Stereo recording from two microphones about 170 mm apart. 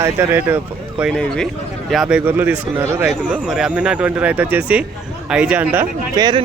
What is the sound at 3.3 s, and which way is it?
Speech, 5° right (ahead or behind).